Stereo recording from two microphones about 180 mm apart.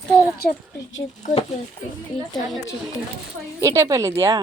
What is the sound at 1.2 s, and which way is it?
Speech, 35° left (ahead or behind).